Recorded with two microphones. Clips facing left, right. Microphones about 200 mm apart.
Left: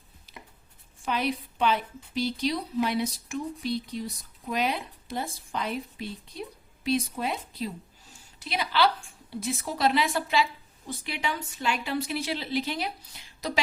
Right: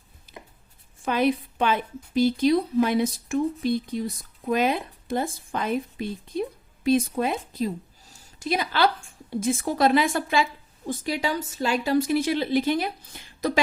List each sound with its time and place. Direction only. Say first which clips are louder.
1.0 s a woman's voice: right 6 dB; 50° right (ahead or behind)